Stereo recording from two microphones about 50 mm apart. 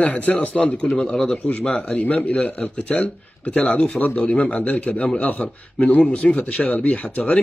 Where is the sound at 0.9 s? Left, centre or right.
Centre.